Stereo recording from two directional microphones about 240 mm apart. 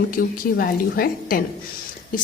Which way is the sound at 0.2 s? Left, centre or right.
Left.